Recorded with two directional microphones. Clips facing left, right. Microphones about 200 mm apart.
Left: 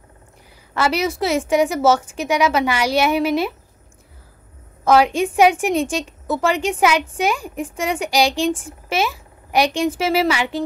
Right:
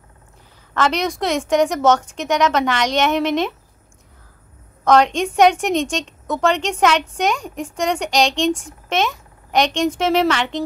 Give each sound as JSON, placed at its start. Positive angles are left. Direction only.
{"t": 0.7, "sound": "a woman's voice", "side_deg": 5}
{"t": 4.8, "sound": "a woman's voice", "side_deg": 5}